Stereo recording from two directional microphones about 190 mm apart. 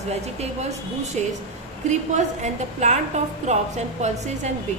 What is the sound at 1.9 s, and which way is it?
A woman's voice, 40° right (ahead or behind).